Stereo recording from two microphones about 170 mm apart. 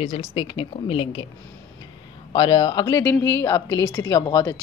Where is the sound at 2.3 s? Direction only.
25° left (ahead or behind).